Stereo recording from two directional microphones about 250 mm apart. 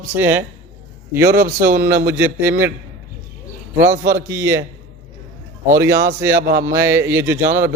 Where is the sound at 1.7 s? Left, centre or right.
Centre.